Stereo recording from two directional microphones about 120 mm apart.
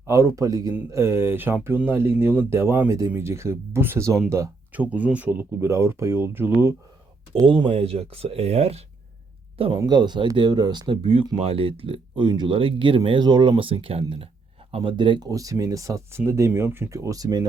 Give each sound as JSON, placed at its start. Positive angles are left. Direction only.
{"t": 0.1, "sound": "speech", "side_deg": -25}
{"t": 7.4, "sound": "speech", "side_deg": -45}
{"t": 9.6, "sound": "speech", "side_deg": -50}
{"t": 9.8, "sound": "speech", "side_deg": -35}
{"t": 15.3, "sound": "speech", "side_deg": -30}